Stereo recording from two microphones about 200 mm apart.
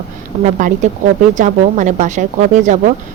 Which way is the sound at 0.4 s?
35° right (ahead or behind).